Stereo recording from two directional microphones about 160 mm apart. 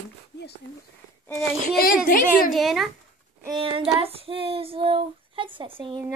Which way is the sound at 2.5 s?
Centre (ahead or behind).